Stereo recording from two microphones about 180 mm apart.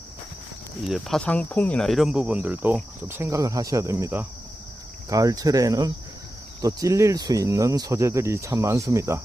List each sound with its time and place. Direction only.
0.9 s speech: centre (ahead or behind)